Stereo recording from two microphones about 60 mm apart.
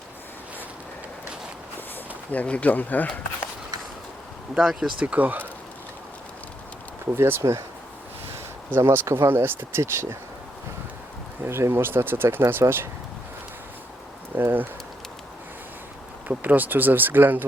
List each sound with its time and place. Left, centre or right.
2.3 s speech: left
4.5 s speech: centre
4.9 s speech: right
7.1 s speech: right
8.7 s speech: right
11.4 s speech: right
14.3 s speech: right
16.3 s speech: right